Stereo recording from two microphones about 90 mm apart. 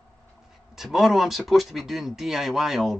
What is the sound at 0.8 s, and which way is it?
Speech, centre (ahead or behind).